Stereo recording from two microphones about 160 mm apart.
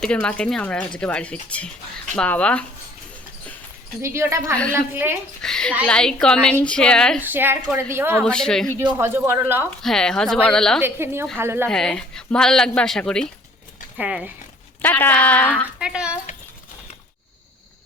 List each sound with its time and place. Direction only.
0.0 s speech: 5° left (ahead or behind)
4.0 s a woman's voice: 15° right (ahead or behind)
5.4 s a sound: 5° left (ahead or behind)
5.8 s speech: 5° left (ahead or behind)
7.2 s a woman's voice: 15° right (ahead or behind)
8.2 s speech: 5° left (ahead or behind)
9.0 s a woman's voice: 15° right (ahead or behind)
9.6 s speech: 5° left (ahead or behind)
10.8 s a woman's voice: 15° right (ahead or behind)
11.7 s speech: 5° left (ahead or behind)
13.9 s speech: 5° right (ahead or behind)
14.8 s speech: 10° left (ahead or behind)
15.8 s speech: 5° right (ahead or behind)